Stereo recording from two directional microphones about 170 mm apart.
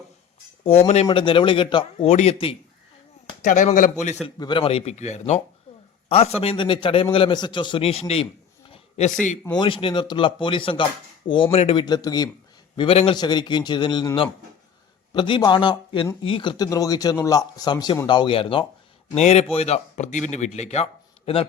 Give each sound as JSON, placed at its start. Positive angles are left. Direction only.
{"t": 0.6, "sound": "speech", "side_deg": 40}
{"t": 1.0, "sound": "a man's voice", "side_deg": 30}
{"t": 3.4, "sound": "a man's voice", "side_deg": 45}
{"t": 4.4, "sound": "a man's voice", "side_deg": 25}
{"t": 8.7, "sound": "a sound", "side_deg": 40}
{"t": 9.6, "sound": "a man's voice", "side_deg": 30}